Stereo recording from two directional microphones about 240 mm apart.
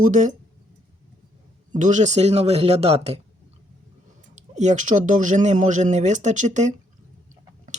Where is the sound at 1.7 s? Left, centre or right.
Right.